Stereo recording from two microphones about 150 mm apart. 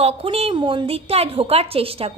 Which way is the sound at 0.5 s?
30° right (ahead or behind).